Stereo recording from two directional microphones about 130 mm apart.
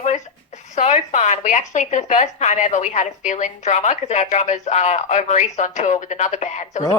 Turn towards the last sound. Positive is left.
turn(degrees=65)  # may be behind; listen again after turning